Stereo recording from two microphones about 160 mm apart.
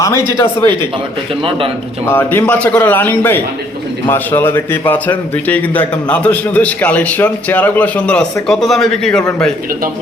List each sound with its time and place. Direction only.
0.0 s a man's voice: 15° left (ahead or behind)
1.4 s a man's voice: 35° right (ahead or behind)
2.0 s a man's voice: 15° left (ahead or behind)